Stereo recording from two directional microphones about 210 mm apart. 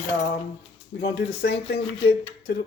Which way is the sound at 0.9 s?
55° left (ahead or behind).